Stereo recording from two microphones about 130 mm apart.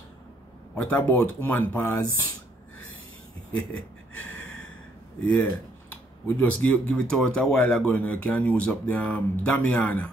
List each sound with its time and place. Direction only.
0.7 s speech: 10° left (ahead or behind)
3.7 s gasp: 10° left (ahead or behind)
5.2 s speech: 15° left (ahead or behind)